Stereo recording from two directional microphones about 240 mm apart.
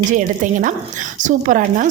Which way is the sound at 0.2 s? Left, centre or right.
Right.